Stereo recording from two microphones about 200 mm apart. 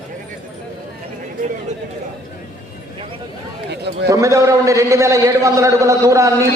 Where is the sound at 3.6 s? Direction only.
55° right (ahead or behind).